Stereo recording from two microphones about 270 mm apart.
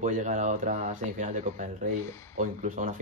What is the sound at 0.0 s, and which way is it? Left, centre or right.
Speech, right.